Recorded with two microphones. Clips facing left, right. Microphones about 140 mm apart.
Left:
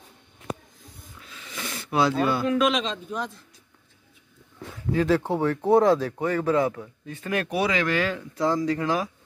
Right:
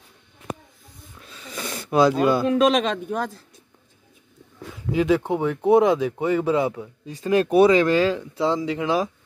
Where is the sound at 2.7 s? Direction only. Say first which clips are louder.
Right 6 dB; 60° right (ahead or behind).